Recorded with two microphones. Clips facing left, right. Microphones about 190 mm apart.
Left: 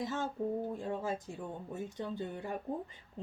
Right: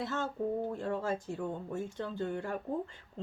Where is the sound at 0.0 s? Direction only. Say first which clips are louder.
Right 1 dB; 15° left (ahead or behind).